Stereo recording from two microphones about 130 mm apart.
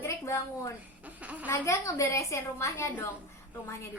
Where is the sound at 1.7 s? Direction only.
25° left (ahead or behind).